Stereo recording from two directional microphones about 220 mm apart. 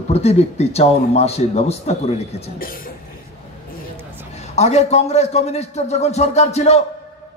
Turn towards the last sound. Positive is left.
turn(degrees=30)  # may be behind; listen again after turning